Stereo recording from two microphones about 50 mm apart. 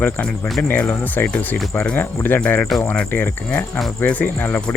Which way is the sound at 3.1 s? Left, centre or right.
Left.